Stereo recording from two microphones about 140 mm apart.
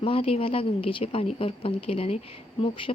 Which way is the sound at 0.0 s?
40° left (ahead or behind).